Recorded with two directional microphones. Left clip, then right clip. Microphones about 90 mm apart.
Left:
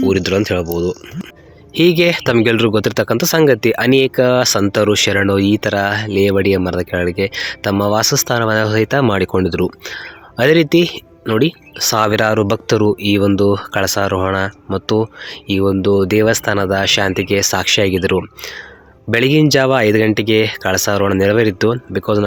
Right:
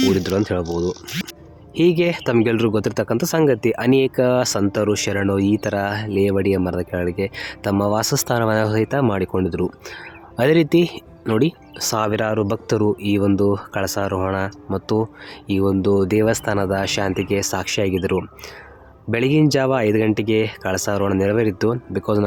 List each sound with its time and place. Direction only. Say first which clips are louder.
0.1 s speech: left 5 dB; 35° left (ahead or behind)
1.7 s speech: left 5 dB; 35° left (ahead or behind)
4.7 s speech: left 7 dB; 45° left (ahead or behind); by 8.1 s 25° left (ahead or behind)
8.1 s speech: left 4 dB; 10° left (ahead or behind); by 9.7 s 40° left (ahead or behind)
9.8 s speech: left 7 dB; 15° left (ahead or behind)
11.9 s speech: left 6 dB; 55° left (ahead or behind)
12.6 s speech: left 5 dB; 35° left (ahead or behind)